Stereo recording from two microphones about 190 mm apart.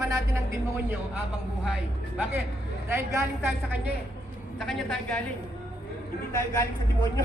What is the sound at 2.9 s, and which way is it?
Speech, 10° right (ahead or behind).